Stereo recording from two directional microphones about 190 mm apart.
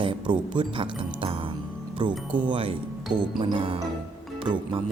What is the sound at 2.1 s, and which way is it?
Speech, 5° right (ahead or behind).